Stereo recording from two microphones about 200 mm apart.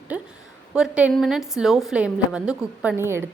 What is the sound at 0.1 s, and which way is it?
A woman's voice, 5° right (ahead or behind).